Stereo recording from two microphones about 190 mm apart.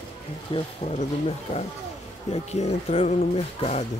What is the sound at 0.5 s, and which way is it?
Speech, 35° left (ahead or behind).